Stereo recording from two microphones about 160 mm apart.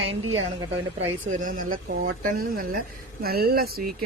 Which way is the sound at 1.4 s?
60° right (ahead or behind).